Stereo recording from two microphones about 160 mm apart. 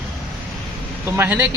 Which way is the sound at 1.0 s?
15° right (ahead or behind).